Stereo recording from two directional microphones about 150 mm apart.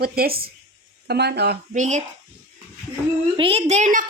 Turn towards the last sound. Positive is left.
turn(degrees=-55)  # may be behind; listen again after turning